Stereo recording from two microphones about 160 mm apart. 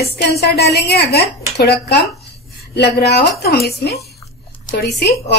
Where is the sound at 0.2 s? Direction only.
85° left.